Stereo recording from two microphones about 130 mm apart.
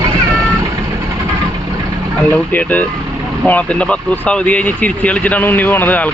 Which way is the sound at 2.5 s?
10° left (ahead or behind).